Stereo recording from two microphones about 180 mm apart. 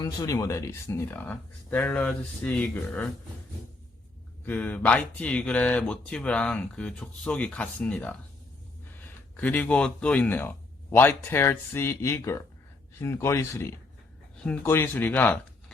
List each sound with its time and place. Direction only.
0.0 s speech: 20° left (ahead or behind)
4.4 s speech: 10° left (ahead or behind)